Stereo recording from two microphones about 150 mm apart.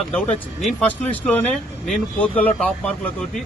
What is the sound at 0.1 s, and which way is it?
Speech, 10° left (ahead or behind).